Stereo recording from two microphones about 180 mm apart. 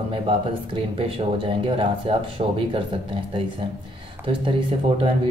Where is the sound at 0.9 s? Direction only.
30° right (ahead or behind).